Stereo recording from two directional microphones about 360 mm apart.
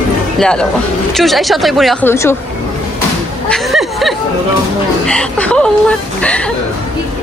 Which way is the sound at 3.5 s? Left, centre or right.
Centre.